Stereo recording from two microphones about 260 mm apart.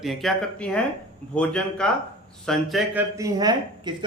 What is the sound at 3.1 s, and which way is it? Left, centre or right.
Speech, centre.